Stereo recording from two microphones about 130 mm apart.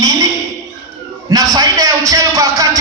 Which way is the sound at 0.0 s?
25° right (ahead or behind).